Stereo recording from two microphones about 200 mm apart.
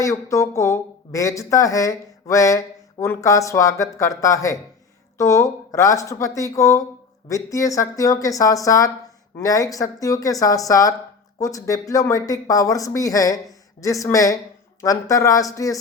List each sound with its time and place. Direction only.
0.0 s speech: 15° left (ahead or behind)